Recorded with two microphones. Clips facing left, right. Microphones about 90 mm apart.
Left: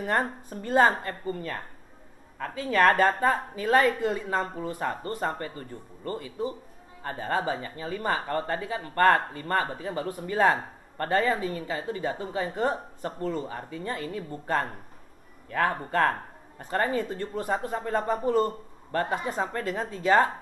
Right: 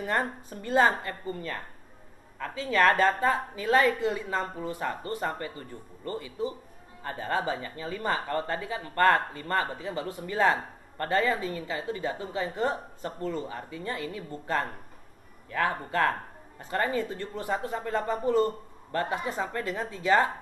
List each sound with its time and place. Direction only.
0.0 s speech: 45° left (ahead or behind)